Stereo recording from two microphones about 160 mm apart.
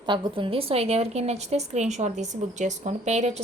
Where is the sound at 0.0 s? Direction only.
30° right (ahead or behind).